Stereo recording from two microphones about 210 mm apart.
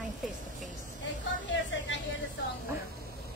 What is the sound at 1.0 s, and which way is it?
Speech, 60° left (ahead or behind).